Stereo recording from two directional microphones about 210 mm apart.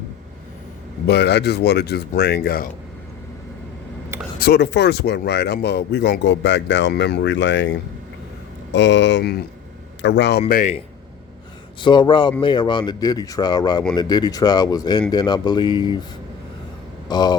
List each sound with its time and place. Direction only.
1.0 s speech: 50° left (ahead or behind)
4.4 s speech: 50° left (ahead or behind)
10.5 s speech: 35° left (ahead or behind)
11.8 s speech: 20° left (ahead or behind)
17.1 s speech: 20° left (ahead or behind)